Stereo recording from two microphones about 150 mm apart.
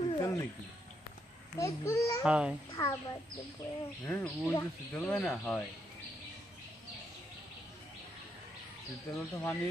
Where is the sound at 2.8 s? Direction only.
20° left (ahead or behind).